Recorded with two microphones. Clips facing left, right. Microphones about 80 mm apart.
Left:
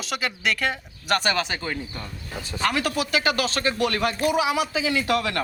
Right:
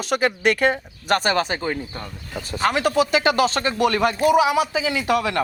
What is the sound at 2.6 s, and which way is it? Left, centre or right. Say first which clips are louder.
Speech: right 5 dB; centre.